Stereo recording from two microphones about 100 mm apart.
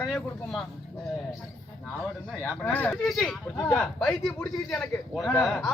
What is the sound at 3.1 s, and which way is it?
Speech, centre (ahead or behind).